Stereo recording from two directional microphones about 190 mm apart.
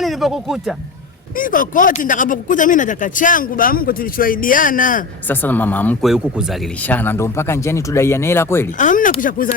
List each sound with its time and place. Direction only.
0.0 s speech: centre (ahead or behind)
1.4 s speech: 45° left (ahead or behind)
5.3 s speech: 10° left (ahead or behind)
6.1 s speech: 5° right (ahead or behind)
6.8 s speech: 10° left (ahead or behind)
8.8 s speech: 45° left (ahead or behind)